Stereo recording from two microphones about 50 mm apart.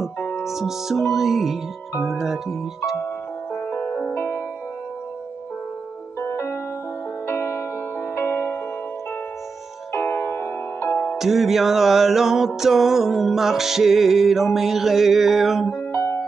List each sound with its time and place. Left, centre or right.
0.5 s music: centre
2.0 s speech: centre
3.7 s music: left
6.1 s music: left
10.0 s music: left
11.1 s music: centre
15.9 s music: left